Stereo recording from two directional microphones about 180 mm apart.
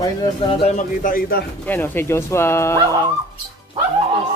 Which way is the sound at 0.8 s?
50° left (ahead or behind).